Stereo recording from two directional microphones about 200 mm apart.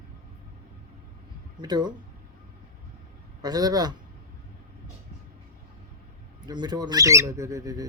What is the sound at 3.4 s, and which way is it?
Speech, 20° right (ahead or behind).